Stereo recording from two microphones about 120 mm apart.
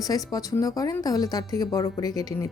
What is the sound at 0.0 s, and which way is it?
A woman's voice, 30° left (ahead or behind).